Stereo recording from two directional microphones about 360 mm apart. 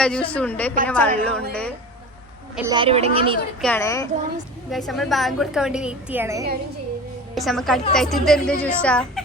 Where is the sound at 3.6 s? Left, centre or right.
Centre.